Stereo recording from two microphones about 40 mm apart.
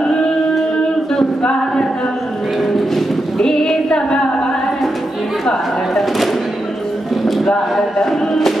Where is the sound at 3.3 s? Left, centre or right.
Centre.